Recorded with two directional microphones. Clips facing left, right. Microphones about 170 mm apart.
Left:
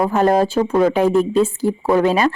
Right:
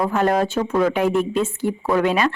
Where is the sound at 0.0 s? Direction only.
35° left (ahead or behind).